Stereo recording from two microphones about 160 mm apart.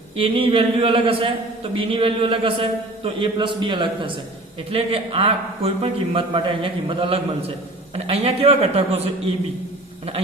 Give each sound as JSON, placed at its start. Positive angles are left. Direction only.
{"t": 0.2, "sound": "a man's voice", "side_deg": -35}